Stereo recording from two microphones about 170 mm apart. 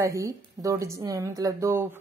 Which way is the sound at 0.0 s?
20° right (ahead or behind).